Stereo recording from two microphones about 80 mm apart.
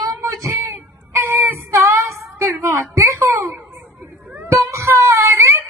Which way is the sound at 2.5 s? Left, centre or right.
Right.